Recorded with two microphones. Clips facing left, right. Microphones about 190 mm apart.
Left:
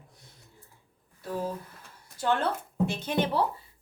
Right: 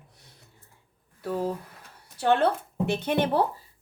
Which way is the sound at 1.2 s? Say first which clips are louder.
Right 4 dB; 65° right (ahead or behind).